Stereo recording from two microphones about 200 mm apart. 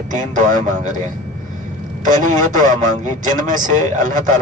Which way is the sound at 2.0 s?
40° right (ahead or behind).